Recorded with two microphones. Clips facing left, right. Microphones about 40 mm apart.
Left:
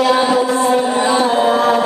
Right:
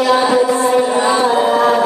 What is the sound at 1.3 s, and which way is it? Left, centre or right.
Music, left.